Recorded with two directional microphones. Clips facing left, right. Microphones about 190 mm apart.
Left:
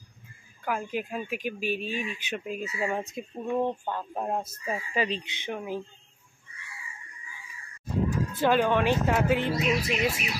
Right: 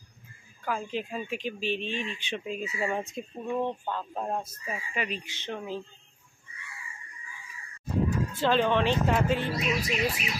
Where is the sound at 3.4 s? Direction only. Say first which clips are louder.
Left 2 dB; 15° left (ahead or behind).